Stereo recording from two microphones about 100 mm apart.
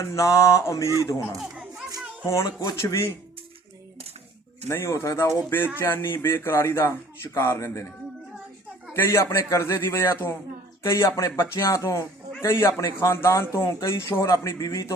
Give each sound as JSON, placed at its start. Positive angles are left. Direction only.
{"t": 0.0, "sound": "speech", "side_deg": 30}
{"t": 2.3, "sound": "speech", "side_deg": 30}
{"t": 4.7, "sound": "speech", "side_deg": 25}
{"t": 8.9, "sound": "speech", "side_deg": 25}